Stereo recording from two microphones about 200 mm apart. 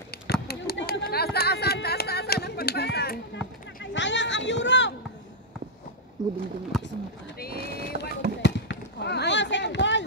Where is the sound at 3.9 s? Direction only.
65° left (ahead or behind).